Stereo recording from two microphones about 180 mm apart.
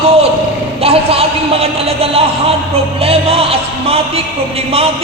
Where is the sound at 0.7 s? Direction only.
35° right (ahead or behind).